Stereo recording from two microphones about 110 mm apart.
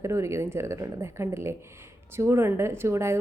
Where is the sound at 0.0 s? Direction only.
25° right (ahead or behind).